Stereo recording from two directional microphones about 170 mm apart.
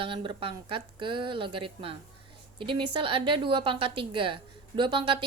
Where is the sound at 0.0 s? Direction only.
30° right (ahead or behind).